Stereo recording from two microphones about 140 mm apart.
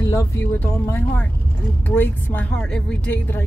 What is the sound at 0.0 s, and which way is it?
Speech, 20° left (ahead or behind).